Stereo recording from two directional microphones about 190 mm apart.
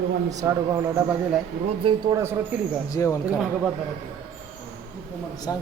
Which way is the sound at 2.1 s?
15° right (ahead or behind).